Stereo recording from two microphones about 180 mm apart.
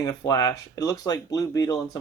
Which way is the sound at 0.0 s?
20° left (ahead or behind).